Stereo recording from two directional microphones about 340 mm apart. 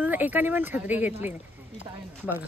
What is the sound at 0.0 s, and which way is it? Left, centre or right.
Speech, centre.